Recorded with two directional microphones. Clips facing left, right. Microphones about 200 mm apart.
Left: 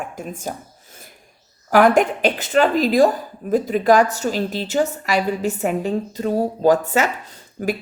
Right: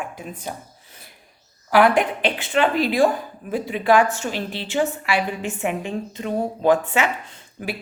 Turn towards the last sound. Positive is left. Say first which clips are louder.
# left 7 dB
turn(degrees=40)  # may be behind; listen again after turning